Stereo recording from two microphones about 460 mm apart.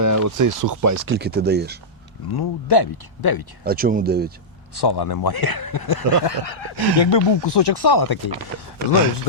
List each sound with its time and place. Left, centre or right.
0.0 s speech: right
1.0 s speech: right
2.3 s speech: left
3.6 s speech: centre
4.8 s speech: left
6.2 s speech: left